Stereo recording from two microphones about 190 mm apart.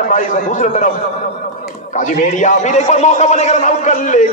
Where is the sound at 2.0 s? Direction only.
40° left (ahead or behind).